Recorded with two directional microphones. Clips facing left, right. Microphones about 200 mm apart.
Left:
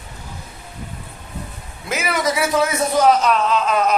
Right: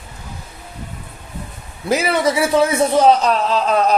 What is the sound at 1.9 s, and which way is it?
A man's voice, 30° right (ahead or behind).